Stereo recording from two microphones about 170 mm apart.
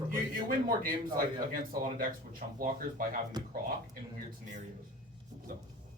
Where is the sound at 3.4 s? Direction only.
25° right (ahead or behind).